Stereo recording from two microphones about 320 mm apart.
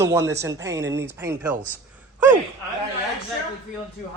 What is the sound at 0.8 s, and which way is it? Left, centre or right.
Speech, right.